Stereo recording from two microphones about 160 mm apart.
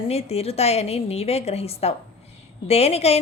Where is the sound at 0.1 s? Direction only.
40° left (ahead or behind).